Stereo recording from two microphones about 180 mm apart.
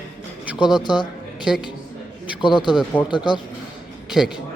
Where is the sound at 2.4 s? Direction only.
25° left (ahead or behind).